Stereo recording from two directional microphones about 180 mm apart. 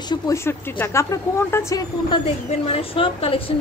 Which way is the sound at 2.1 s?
30° left (ahead or behind).